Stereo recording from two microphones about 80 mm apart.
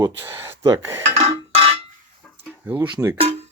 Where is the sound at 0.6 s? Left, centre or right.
Right.